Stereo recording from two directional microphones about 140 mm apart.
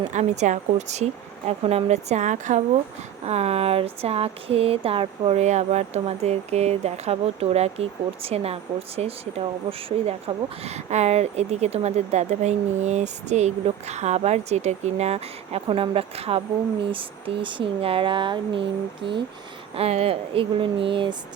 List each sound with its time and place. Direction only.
0.1 s speech: 60° right (ahead or behind)
3.2 s speech: 50° right (ahead or behind)